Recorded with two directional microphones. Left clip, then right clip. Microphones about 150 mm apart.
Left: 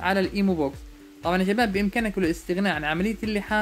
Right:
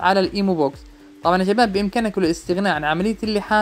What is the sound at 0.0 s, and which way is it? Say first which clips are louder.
Speech: right 6 dB; 25° right (ahead or behind).